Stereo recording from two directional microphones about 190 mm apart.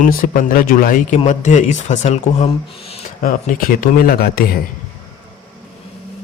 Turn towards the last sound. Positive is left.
turn(degrees=50)  # may be behind; listen again after turning